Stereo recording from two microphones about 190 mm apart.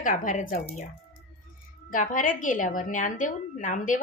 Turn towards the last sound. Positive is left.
turn(degrees=40)  # may be behind; listen again after turning